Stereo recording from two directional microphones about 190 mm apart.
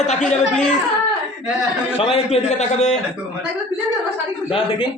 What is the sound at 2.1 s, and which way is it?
Speech, 35° left (ahead or behind).